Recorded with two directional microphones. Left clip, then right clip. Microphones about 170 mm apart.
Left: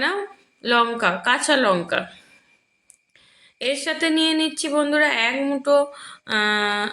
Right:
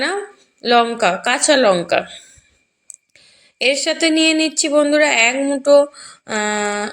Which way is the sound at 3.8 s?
30° right (ahead or behind).